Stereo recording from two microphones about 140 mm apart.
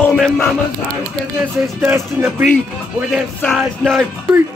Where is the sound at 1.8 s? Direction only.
15° right (ahead or behind).